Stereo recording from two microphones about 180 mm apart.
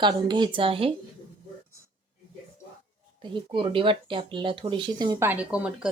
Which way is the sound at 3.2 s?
30° right (ahead or behind).